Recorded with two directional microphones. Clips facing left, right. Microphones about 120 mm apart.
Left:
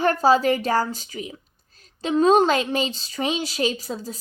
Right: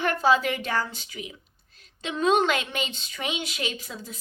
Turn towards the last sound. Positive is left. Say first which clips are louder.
# left 7 dB
turn(degrees=35)  # may be behind; listen again after turning